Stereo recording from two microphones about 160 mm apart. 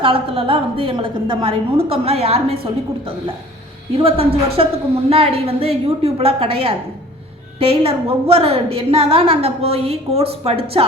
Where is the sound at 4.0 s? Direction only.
35° right (ahead or behind).